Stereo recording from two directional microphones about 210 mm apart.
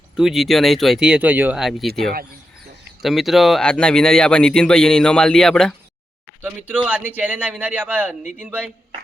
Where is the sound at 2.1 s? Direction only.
45° right (ahead or behind).